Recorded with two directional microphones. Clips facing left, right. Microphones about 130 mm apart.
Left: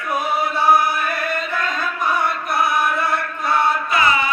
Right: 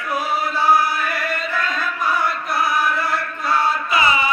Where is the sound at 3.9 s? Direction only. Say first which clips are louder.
Even; 5° right (ahead or behind).